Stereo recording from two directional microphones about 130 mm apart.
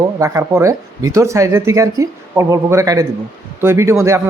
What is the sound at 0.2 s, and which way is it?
A man's voice, 20° right (ahead or behind).